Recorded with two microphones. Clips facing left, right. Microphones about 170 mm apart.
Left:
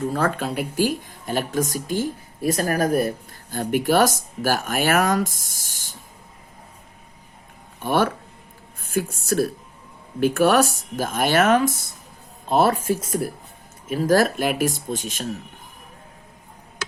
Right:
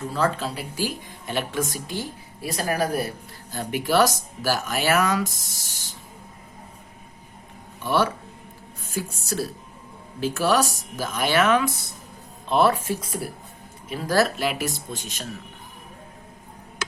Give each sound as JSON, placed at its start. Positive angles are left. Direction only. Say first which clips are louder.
{"t": 0.1, "sound": "speech", "louder": "left 1 dB", "side_deg": 55}
{"t": 7.8, "sound": "a woman's voice", "louder": "left 2 dB", "side_deg": 50}